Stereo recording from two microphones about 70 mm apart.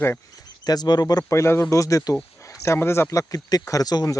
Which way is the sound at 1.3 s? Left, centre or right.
Left.